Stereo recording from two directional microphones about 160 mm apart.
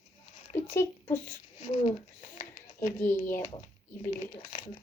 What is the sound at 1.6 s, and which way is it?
Speech, 40° left (ahead or behind).